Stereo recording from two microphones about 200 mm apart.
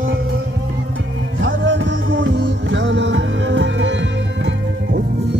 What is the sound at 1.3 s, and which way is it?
Music, 65° right (ahead or behind).